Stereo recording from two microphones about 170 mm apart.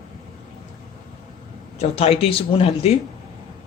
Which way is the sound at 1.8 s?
40° left (ahead or behind).